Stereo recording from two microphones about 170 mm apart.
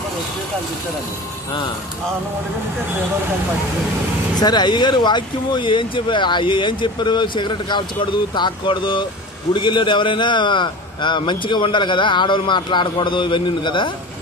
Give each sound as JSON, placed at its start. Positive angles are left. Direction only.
{"t": 4.4, "sound": "speech", "side_deg": 25}